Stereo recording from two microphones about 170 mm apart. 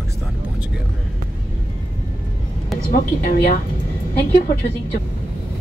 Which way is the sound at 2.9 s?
50° left (ahead or behind).